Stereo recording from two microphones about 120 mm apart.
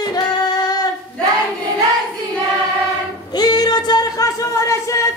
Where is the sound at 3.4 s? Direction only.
35° left (ahead or behind).